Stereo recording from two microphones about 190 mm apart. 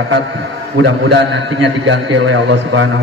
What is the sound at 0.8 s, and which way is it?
A man's voice, 70° right (ahead or behind).